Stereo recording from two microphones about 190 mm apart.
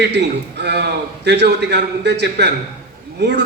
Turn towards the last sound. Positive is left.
turn(degrees=-65)  # may be behind; listen again after turning